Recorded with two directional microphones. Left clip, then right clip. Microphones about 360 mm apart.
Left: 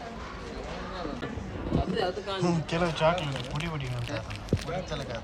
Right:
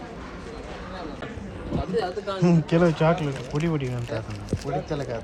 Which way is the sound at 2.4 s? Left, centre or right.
Centre.